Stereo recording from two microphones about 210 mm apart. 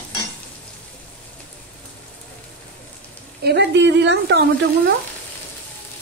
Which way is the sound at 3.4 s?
55° right (ahead or behind).